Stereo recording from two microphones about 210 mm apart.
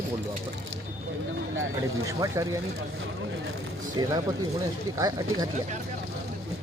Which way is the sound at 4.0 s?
20° right (ahead or behind).